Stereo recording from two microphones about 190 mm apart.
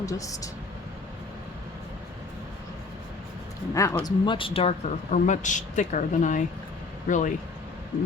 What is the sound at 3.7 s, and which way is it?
Speech, 15° left (ahead or behind).